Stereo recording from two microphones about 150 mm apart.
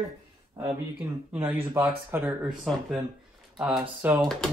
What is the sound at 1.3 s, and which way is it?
Speech, 10° right (ahead or behind).